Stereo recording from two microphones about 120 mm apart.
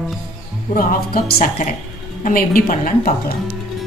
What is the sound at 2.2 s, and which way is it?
Speech, 90° left.